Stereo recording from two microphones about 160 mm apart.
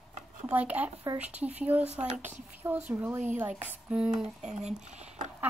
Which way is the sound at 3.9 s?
5° right (ahead or behind).